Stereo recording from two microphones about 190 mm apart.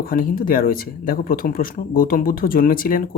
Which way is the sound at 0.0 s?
50° left (ahead or behind).